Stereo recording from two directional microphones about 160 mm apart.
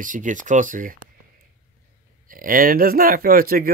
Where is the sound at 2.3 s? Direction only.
60° right (ahead or behind).